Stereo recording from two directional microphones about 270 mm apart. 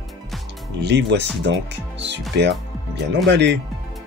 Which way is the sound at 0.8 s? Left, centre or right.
Right.